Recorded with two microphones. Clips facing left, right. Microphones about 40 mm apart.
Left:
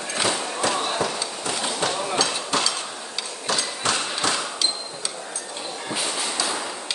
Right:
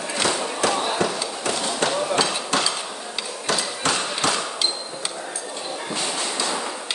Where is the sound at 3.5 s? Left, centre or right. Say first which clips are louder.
Right 1 dB; centre.